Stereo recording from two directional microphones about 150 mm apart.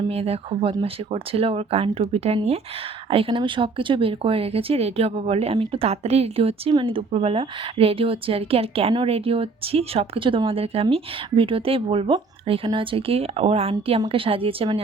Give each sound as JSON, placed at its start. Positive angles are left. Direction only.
{"t": 0.1, "sound": "speech", "side_deg": -40}